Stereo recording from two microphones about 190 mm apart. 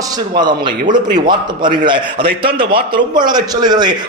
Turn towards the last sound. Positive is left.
turn(degrees=-20)  # may be behind; listen again after turning